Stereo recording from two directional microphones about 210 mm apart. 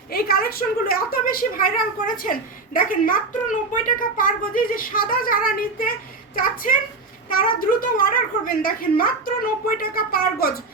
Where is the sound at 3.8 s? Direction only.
40° left (ahead or behind).